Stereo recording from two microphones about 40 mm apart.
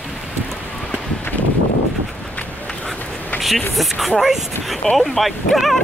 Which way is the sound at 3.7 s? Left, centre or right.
Centre.